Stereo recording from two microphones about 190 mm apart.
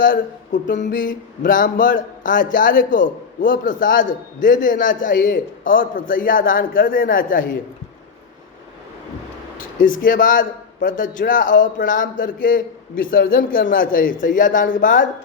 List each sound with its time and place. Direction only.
0.0 s a man's voice: 45° left (ahead or behind)
9.8 s a man's voice: 45° left (ahead or behind)